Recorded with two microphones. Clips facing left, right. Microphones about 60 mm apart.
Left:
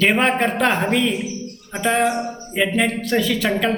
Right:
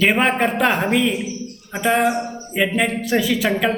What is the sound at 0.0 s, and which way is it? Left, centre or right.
A man's voice, centre.